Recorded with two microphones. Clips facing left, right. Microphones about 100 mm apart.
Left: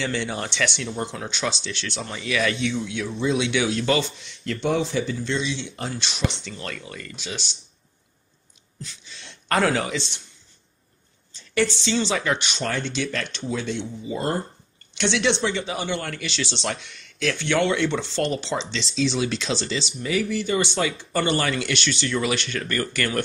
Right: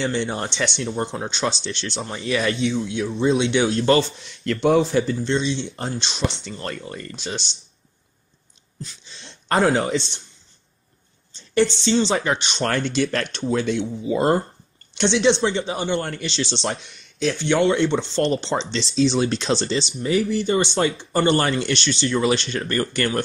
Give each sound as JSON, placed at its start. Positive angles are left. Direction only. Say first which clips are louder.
{"t": 0.0, "sound": "speech", "louder": "right 3 dB", "side_deg": -30}
{"t": 4.5, "sound": "speech", "louder": "right 6 dB", "side_deg": -50}
{"t": 5.2, "sound": "speech", "louder": "right 4 dB", "side_deg": -35}
{"t": 9.0, "sound": "a sound", "louder": "right 1 dB", "side_deg": -25}
{"t": 9.8, "sound": "speech", "louder": "right 5 dB", "side_deg": -35}
{"t": 11.3, "sound": "speech", "louder": "right 4 dB", "side_deg": -30}
{"t": 12.6, "sound": "speech", "louder": "right 5 dB", "side_deg": -55}
{"t": 15.0, "sound": "speech", "louder": "right 4 dB", "side_deg": -25}